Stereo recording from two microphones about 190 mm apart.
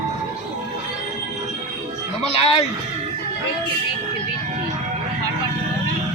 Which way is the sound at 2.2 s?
30° left (ahead or behind).